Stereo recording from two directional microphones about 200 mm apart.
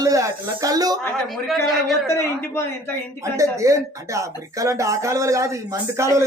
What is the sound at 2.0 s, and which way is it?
Speech, 15° left (ahead or behind).